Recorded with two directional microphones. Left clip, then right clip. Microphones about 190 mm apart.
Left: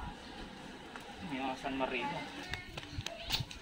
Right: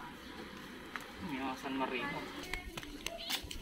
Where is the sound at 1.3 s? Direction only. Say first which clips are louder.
Left 2 dB; 5° left (ahead or behind).